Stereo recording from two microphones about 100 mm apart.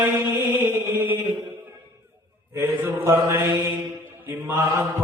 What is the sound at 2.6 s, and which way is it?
Mantra, 20° right (ahead or behind).